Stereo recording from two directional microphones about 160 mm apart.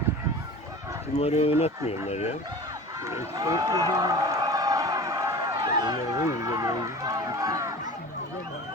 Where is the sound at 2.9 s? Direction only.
20° right (ahead or behind).